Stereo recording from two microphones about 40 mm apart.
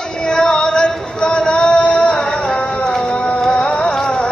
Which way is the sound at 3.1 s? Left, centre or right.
Left.